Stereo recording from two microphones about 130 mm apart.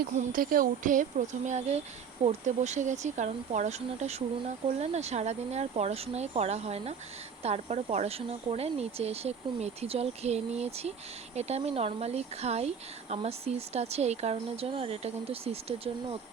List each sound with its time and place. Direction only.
0.2 s speech: 90° right; by 16.1 s 45° right (ahead or behind)